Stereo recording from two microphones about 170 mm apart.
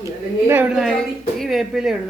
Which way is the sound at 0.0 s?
15° right (ahead or behind).